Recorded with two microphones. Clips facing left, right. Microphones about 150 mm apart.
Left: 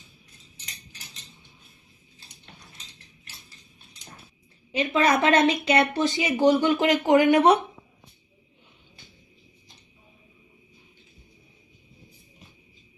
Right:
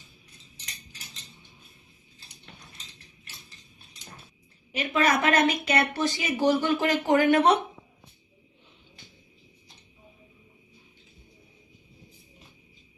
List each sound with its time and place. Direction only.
4.8 s speech: 25° left (ahead or behind)